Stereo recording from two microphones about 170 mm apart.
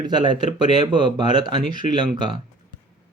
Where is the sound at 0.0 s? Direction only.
25° right (ahead or behind).